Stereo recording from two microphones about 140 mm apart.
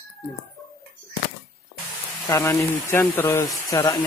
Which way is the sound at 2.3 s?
20° left (ahead or behind).